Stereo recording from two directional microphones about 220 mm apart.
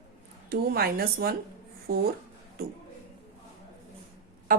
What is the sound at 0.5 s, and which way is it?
A woman's voice, 45° right (ahead or behind).